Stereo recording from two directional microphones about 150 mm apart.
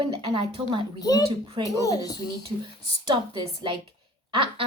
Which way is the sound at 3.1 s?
30° right (ahead or behind).